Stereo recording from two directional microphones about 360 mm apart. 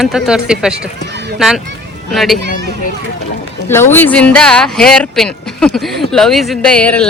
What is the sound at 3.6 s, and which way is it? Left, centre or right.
Speech, centre.